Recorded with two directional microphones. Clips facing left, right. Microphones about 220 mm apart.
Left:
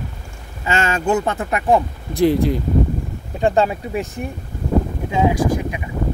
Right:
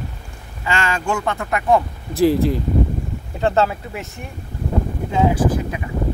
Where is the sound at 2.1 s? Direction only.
5° right (ahead or behind).